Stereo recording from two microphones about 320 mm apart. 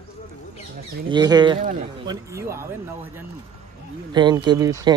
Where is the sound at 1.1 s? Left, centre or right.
Centre.